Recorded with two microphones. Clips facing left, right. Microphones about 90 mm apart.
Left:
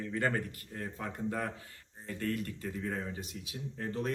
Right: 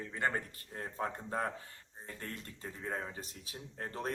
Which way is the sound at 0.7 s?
35° right (ahead or behind).